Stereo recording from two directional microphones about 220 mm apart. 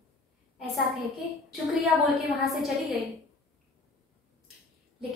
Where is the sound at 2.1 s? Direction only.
Centre (ahead or behind).